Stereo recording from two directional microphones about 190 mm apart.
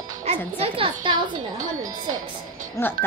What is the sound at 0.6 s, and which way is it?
Speech, 30° right (ahead or behind).